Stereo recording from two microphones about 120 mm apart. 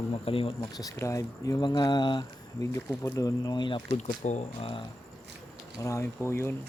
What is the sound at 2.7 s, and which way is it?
Speech, 25° left (ahead or behind).